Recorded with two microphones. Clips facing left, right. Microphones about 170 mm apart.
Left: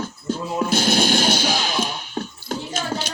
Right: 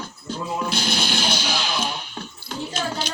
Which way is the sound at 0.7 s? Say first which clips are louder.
Left 6 dB; 50° left (ahead or behind).